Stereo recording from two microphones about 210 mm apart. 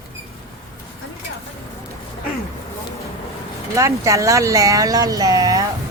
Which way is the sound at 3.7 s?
15° right (ahead or behind).